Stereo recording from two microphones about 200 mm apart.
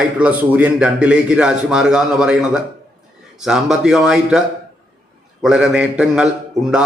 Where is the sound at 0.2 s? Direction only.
5° right (ahead or behind).